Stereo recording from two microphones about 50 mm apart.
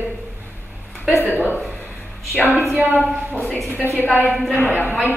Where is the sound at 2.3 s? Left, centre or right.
Left.